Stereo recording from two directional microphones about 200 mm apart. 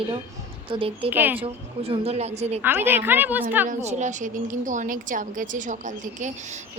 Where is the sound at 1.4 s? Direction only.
30° right (ahead or behind).